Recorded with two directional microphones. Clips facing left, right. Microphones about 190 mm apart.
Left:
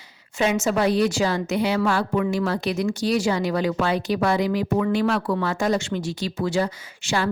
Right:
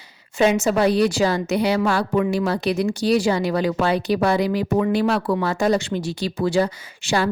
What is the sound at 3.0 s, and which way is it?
A woman's voice, 35° right (ahead or behind).